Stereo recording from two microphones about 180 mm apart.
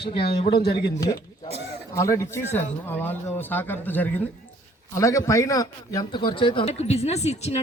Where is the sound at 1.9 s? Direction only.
15° left (ahead or behind).